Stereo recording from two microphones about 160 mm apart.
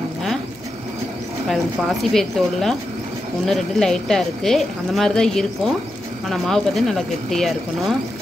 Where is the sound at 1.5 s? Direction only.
Centre (ahead or behind).